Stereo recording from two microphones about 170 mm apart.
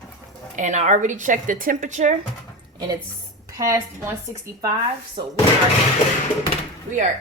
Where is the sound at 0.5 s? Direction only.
45° right (ahead or behind).